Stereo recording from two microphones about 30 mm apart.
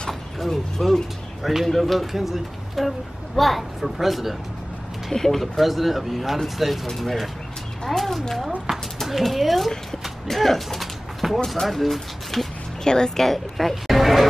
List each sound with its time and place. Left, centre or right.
0.4 s speech: centre
1.4 s speech: centre
5.1 s speech: centre
5.4 s speech: centre
10.2 s a sound: centre
11.6 s speech: centre
12.8 s speech: left
13.2 s speech: centre
13.8 s a sound: centre